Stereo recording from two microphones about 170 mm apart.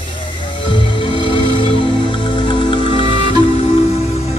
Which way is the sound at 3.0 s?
30° right (ahead or behind).